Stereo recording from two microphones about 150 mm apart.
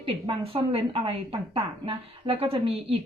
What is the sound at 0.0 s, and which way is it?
Speech, 40° right (ahead or behind).